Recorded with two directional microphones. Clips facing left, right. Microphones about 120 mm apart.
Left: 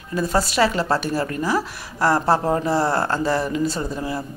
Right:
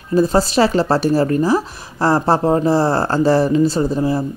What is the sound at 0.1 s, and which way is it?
Speech, 25° right (ahead or behind).